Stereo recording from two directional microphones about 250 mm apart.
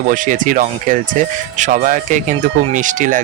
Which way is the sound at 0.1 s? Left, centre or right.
Right.